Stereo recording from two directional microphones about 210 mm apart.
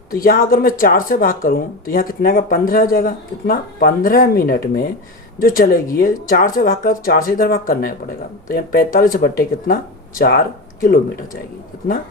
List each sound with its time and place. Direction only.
0.1 s speech: 45° left (ahead or behind)